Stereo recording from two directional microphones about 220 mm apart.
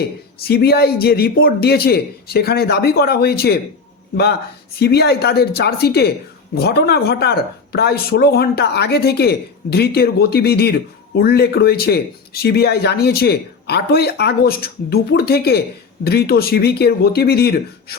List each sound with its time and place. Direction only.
0.0 s speech: 45° left (ahead or behind)
4.8 s speech: 45° left (ahead or behind)